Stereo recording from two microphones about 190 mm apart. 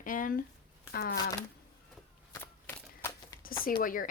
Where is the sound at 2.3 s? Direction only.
10° left (ahead or behind).